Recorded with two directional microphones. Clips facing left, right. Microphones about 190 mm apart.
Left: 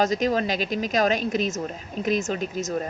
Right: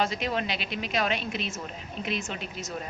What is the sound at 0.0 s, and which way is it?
A woman's voice, 40° left (ahead or behind).